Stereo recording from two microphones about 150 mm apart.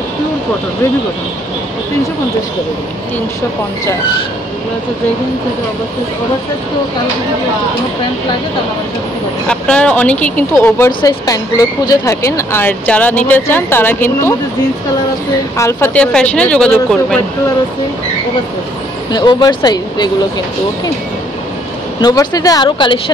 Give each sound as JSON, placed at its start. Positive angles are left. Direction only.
{"t": 9.5, "sound": "speech", "side_deg": 5}
{"t": 10.9, "sound": "speech", "side_deg": 30}
{"t": 15.5, "sound": "speech", "side_deg": 20}
{"t": 19.1, "sound": "speech", "side_deg": 30}
{"t": 22.0, "sound": "speech", "side_deg": 25}